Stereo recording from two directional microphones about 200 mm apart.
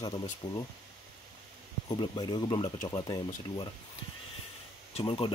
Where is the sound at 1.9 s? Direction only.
20° left (ahead or behind).